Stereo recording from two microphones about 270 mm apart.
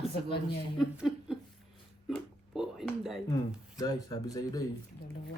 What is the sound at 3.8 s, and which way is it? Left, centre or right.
Speech, centre.